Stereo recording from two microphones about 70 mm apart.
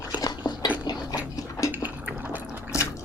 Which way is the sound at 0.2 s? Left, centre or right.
Left.